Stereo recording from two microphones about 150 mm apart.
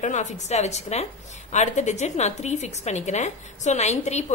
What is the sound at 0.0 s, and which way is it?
A woman's voice, 55° left (ahead or behind).